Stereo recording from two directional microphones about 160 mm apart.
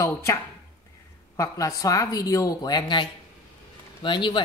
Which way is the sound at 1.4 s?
20° left (ahead or behind).